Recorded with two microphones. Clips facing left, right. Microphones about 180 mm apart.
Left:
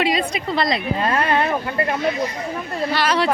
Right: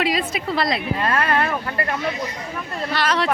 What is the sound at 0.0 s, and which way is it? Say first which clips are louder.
Speech: left 2 dB; centre (ahead or behind).